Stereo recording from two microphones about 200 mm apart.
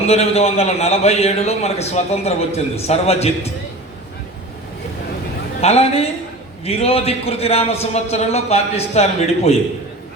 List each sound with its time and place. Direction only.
0.1 s a man's voice: 30° left (ahead or behind)
5.5 s a man's voice: 30° left (ahead or behind)